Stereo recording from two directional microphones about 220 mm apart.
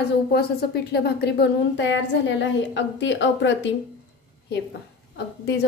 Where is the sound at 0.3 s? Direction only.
45° left (ahead or behind).